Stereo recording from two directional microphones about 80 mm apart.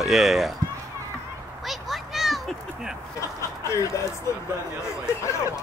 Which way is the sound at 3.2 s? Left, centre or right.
Left.